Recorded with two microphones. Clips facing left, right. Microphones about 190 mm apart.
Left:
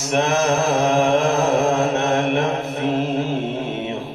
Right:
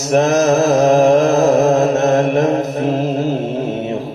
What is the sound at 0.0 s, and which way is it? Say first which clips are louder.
Mantra: right 6 dB; 40° right (ahead or behind).